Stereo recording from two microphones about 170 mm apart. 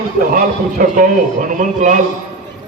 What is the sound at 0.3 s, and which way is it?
A man's voice, 50° right (ahead or behind).